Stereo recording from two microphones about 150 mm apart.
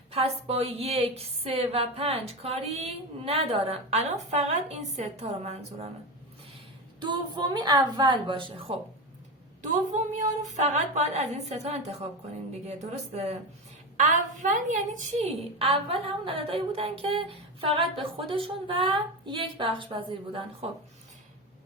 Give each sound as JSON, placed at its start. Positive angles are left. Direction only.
{"t": 0.1, "sound": "a woman's voice", "side_deg": -40}
{"t": 7.0, "sound": "a woman's voice", "side_deg": -30}
{"t": 9.6, "sound": "a woman's voice", "side_deg": -55}
{"t": 13.9, "sound": "a woman's voice", "side_deg": -55}
{"t": 15.2, "sound": "a woman's voice", "side_deg": -40}